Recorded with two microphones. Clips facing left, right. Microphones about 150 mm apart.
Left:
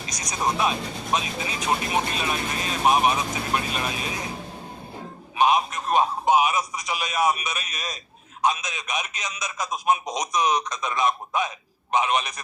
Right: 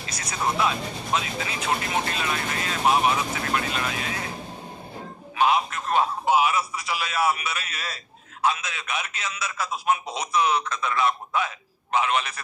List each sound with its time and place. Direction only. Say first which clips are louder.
0.0 s speech: left 1 dB; 15° left (ahead or behind)
5.4 s speech: left 1 dB; 20° left (ahead or behind)